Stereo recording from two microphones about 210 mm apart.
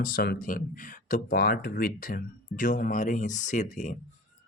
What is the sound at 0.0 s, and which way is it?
Speech, 50° left (ahead or behind).